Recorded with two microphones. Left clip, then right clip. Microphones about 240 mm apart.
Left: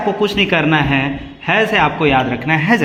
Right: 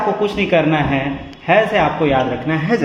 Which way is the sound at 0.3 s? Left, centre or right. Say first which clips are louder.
Left 1 dB; left.